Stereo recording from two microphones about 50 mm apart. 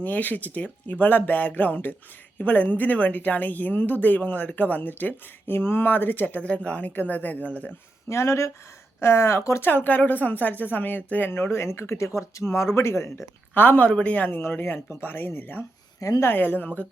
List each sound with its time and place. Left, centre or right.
0.0 s a woman's voice: left
6.5 s a woman's voice: left
8.1 s speech: left
9.0 s speech: left
9.6 s a woman's voice: left
11.3 s speech: left
13.5 s a woman's voice: left
14.3 s a woman's voice: left